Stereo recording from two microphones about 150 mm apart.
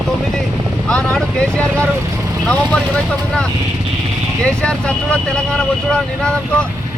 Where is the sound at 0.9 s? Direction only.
5° left (ahead or behind).